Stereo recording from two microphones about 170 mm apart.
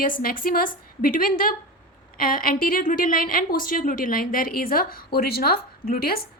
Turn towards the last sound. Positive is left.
turn(degrees=60)  # may be behind; listen again after turning